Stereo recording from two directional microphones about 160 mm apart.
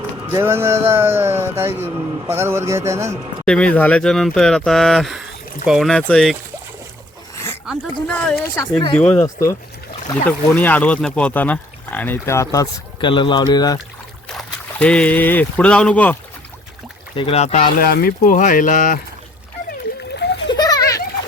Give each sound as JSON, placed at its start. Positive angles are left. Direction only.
{"t": 0.3, "sound": "a man's voice", "side_deg": -15}
{"t": 3.4, "sound": "speech", "side_deg": 5}
{"t": 7.3, "sound": "a sound", "side_deg": 15}
{"t": 8.0, "sound": "speech", "side_deg": 5}
{"t": 13.0, "sound": "speech", "side_deg": 30}
{"t": 14.3, "sound": "speech", "side_deg": 5}
{"t": 17.2, "sound": "speech", "side_deg": 40}
{"t": 17.7, "sound": "speech", "side_deg": 70}
{"t": 18.3, "sound": "speech", "side_deg": 55}
{"t": 20.1, "sound": "splash", "side_deg": 90}
{"t": 20.5, "sound": "children playing", "side_deg": 25}